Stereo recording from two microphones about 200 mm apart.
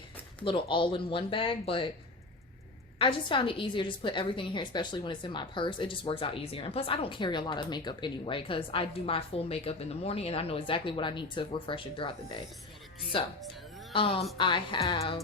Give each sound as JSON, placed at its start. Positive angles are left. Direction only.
{"t": 0.4, "sound": "a woman's voice", "side_deg": 25}
{"t": 3.0, "sound": "a woman's voice", "side_deg": 25}